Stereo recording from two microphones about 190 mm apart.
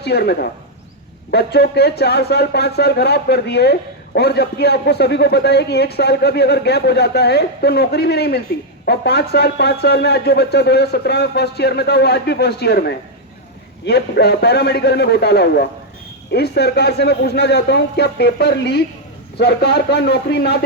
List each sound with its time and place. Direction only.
0.0 s speech: 60° left (ahead or behind)
13.8 s speech: 60° left (ahead or behind)